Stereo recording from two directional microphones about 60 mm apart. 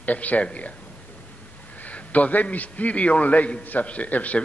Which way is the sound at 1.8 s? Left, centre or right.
Left.